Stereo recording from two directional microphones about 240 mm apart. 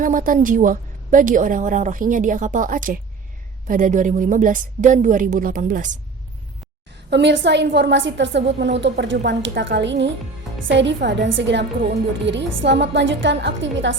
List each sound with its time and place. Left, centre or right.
0.0 s a woman's voice: right
7.1 s a woman's voice: right